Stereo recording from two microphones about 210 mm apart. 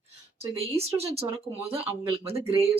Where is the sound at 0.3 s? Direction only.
30° right (ahead or behind).